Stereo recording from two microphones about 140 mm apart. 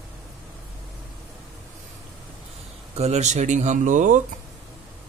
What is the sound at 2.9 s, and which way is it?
Speech, 50° right (ahead or behind).